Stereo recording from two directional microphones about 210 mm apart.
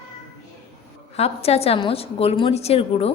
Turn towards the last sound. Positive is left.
turn(degrees=30)  # may be behind; listen again after turning